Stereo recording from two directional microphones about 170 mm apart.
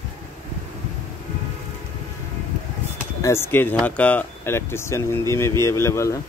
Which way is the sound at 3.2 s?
15° left (ahead or behind).